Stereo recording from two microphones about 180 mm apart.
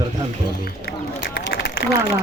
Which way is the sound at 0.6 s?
60° left (ahead or behind).